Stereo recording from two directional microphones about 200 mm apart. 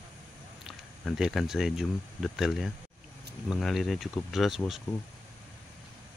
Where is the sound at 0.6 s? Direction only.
Centre (ahead or behind).